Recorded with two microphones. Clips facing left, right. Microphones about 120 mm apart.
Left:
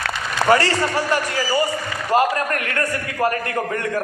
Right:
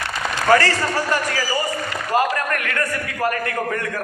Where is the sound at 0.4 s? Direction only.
20° left (ahead or behind).